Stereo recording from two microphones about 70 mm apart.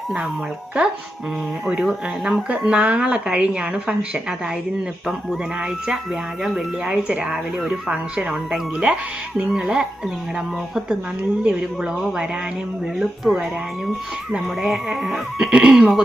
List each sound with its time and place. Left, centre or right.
1.6 s a woman's voice: centre
6.4 s a woman's voice: centre
11.4 s a woman's voice: centre